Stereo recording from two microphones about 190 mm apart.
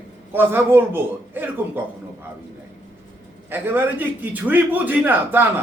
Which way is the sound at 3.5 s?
10° right (ahead or behind).